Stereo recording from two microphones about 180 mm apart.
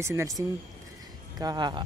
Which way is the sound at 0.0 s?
15° right (ahead or behind).